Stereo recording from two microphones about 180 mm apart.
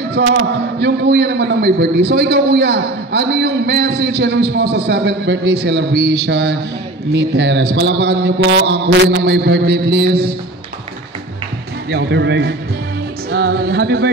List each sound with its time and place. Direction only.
0.1 s a man's voice: 75° right (ahead or behind)
11.9 s a man's voice: 70° right (ahead or behind)
13.3 s music: 65° right (ahead or behind)